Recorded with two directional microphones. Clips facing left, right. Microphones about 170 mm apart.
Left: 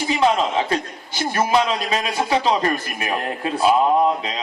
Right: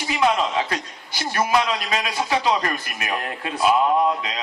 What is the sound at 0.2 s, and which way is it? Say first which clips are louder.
A man's voice: left 1 dB; 30° left (ahead or behind).